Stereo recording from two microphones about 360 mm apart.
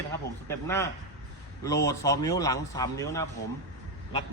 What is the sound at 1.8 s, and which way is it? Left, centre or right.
Speech, centre.